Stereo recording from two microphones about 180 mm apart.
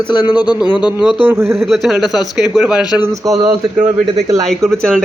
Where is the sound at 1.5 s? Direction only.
Centre (ahead or behind).